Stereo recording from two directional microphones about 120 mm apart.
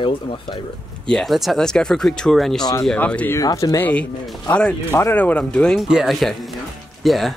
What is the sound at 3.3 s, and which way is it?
Speech, 30° left (ahead or behind).